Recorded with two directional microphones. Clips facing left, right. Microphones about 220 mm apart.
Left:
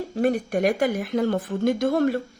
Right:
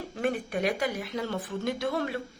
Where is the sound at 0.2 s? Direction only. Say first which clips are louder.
Left 7 dB; 45° left (ahead or behind).